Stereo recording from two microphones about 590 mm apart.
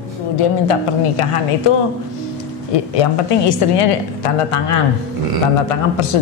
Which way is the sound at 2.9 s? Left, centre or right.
Left.